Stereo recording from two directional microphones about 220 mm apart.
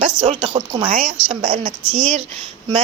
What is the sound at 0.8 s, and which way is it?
Speech, 35° right (ahead or behind).